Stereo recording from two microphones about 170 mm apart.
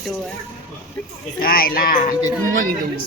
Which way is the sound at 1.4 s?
60° left (ahead or behind).